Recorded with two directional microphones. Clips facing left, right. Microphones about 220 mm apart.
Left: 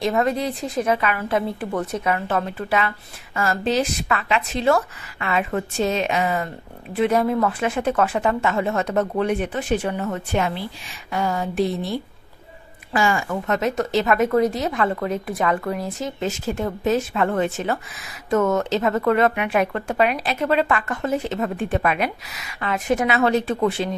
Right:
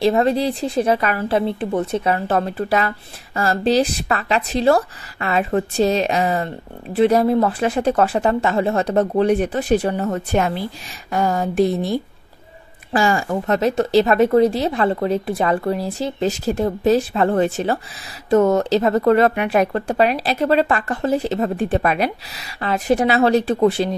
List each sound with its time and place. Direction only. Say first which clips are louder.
0.0 s a woman's voice: right 5 dB; 30° right (ahead or behind)
1.6 s a woman's voice: right 4 dB; 25° right (ahead or behind)